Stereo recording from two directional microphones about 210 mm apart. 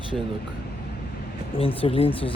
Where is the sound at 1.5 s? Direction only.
25° left (ahead or behind).